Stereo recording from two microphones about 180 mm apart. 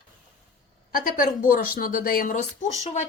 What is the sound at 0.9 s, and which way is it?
A woman's voice, 50° left (ahead or behind).